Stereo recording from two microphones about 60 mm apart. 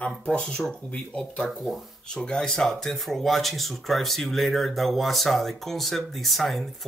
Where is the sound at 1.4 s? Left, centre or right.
Centre.